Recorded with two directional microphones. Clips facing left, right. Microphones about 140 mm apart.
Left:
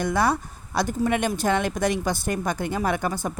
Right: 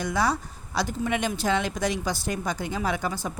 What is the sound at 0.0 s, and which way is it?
A woman's voice, 55° left (ahead or behind).